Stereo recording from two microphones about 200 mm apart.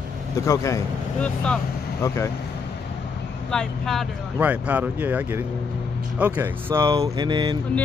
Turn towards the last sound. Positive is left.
turn(degrees=-20)  # may be behind; listen again after turning